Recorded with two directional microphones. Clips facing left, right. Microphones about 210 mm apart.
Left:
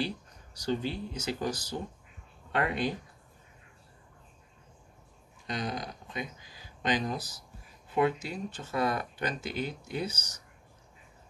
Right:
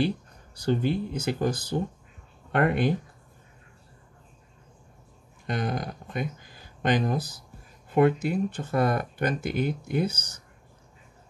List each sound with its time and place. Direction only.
0.6 s speech: 55° right (ahead or behind)
5.5 s speech: 55° right (ahead or behind)